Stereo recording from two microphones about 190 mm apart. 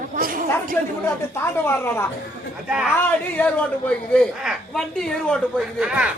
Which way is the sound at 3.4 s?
5° left (ahead or behind).